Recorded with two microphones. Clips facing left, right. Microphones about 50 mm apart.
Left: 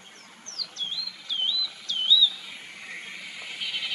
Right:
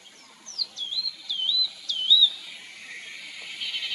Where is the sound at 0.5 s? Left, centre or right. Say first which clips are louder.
Right 1 dB; left.